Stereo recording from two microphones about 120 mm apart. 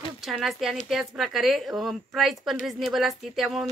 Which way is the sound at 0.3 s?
Centre (ahead or behind).